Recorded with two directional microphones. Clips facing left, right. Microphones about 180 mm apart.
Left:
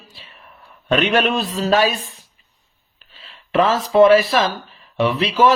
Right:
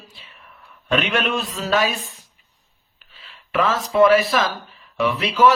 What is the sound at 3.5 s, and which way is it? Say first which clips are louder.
Speech: left 4 dB; 30° left (ahead or behind).